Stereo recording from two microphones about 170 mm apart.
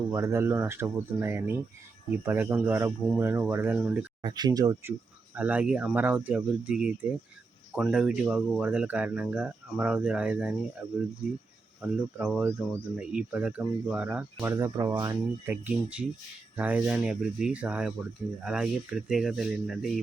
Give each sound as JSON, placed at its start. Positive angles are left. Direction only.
{"t": 0.1, "sound": "speech", "side_deg": -15}
{"t": 4.2, "sound": "speech", "side_deg": -25}
{"t": 11.8, "sound": "speech", "side_deg": 0}